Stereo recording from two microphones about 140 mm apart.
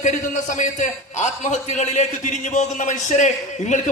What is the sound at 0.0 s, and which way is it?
A man's voice, 65° left (ahead or behind).